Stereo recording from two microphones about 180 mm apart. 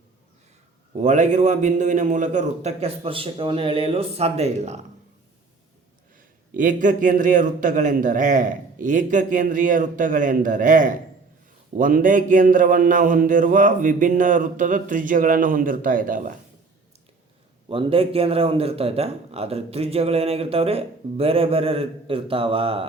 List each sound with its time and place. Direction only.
0.9 s a man's voice: 40° right (ahead or behind)
6.1 s a man's voice: 50° right (ahead or behind)
17.7 s a man's voice: 30° right (ahead or behind)